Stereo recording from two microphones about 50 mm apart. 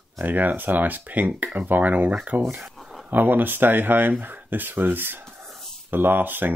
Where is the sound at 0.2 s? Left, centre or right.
Right.